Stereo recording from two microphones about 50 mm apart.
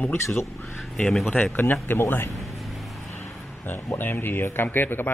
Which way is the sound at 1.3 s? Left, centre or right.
Left.